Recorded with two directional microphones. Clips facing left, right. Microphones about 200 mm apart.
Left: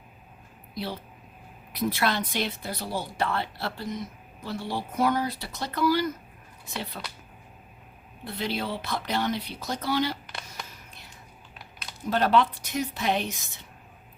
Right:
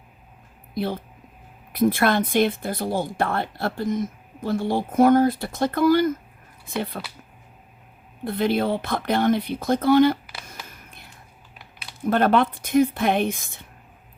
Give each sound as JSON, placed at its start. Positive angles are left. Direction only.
{"t": 0.7, "sound": "speech", "side_deg": -50}
{"t": 8.2, "sound": "speech", "side_deg": -55}
{"t": 10.7, "sound": "whispering", "side_deg": -55}
{"t": 12.0, "sound": "speech", "side_deg": -55}